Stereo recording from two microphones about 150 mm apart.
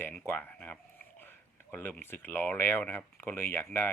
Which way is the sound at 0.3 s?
10° left (ahead or behind).